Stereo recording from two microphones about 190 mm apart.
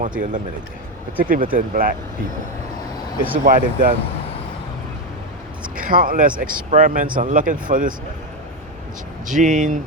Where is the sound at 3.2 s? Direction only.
45° right (ahead or behind).